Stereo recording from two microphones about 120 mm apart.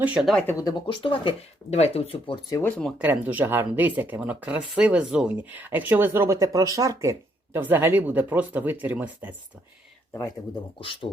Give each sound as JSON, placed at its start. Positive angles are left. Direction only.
{"t": 0.0, "sound": "speech", "side_deg": -10}
{"t": 0.4, "sound": "speech", "side_deg": 30}
{"t": 1.7, "sound": "speech", "side_deg": 60}
{"t": 2.6, "sound": "speech", "side_deg": 10}
{"t": 3.0, "sound": "speech", "side_deg": -15}
{"t": 10.1, "sound": "speech", "side_deg": 25}
{"t": 10.8, "sound": "speech", "side_deg": 45}